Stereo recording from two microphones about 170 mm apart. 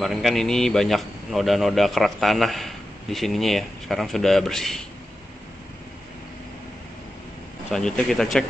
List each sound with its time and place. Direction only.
0.0 s a man's voice: centre (ahead or behind)
7.7 s a man's voice: 5° left (ahead or behind)